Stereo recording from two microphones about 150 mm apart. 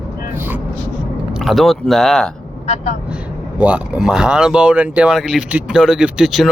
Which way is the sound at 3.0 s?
10° right (ahead or behind).